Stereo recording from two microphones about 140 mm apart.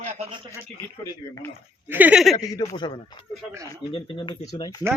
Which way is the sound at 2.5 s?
30° left (ahead or behind).